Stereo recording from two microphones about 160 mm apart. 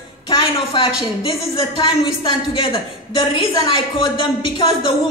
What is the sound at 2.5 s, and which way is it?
A man's voice, 35° left (ahead or behind).